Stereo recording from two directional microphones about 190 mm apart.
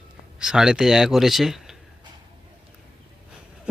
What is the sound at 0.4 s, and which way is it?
A man's voice, 5° right (ahead or behind).